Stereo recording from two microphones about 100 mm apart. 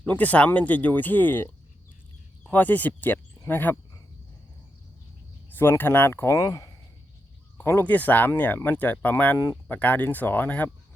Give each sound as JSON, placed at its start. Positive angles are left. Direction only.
{"t": 0.0, "sound": "speech", "side_deg": 15}
{"t": 2.5, "sound": "speech", "side_deg": 20}
{"t": 5.5, "sound": "speech", "side_deg": 20}